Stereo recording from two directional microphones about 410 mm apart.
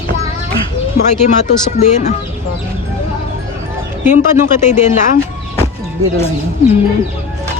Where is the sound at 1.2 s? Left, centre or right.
Centre.